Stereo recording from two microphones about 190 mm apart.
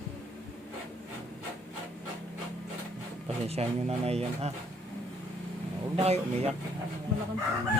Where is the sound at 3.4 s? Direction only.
35° right (ahead or behind).